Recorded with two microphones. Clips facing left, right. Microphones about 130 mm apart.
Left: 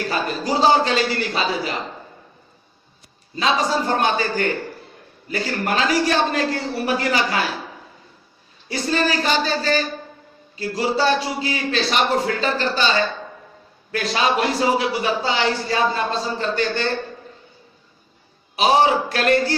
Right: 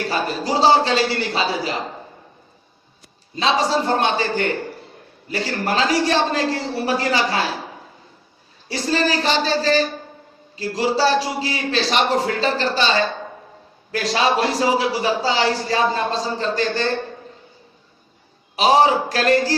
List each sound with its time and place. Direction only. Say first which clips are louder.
0.0 s a man's voice: right 1 dB; 30° right (ahead or behind)
3.3 s a man's voice: right 1 dB; 35° right (ahead or behind)
8.6 s a man's voice: right 1 dB; 35° right (ahead or behind)
18.5 s a man's voice: right 1 dB; 35° right (ahead or behind)